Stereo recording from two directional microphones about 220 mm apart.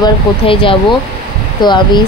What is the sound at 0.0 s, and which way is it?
A woman's voice, 25° left (ahead or behind).